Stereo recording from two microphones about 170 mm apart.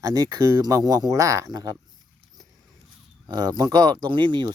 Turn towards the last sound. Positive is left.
turn(degrees=-25)  # may be behind; listen again after turning